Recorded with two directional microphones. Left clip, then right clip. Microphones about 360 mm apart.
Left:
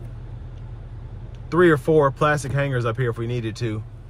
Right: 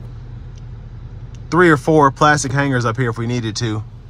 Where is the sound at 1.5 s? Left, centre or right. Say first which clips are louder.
Right 4 dB; centre.